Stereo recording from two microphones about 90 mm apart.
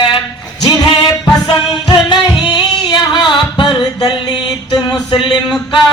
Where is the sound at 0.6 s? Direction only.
50° left (ahead or behind).